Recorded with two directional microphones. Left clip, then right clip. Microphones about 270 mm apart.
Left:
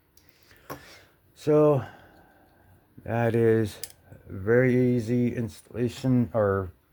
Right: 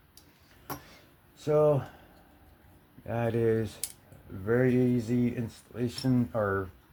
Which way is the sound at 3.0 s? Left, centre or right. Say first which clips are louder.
Left 5 dB; left.